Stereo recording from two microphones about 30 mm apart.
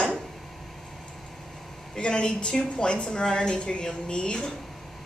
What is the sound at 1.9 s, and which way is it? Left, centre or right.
A woman's voice, left.